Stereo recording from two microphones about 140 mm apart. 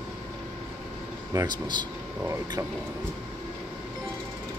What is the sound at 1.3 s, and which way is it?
Speech, 30° right (ahead or behind).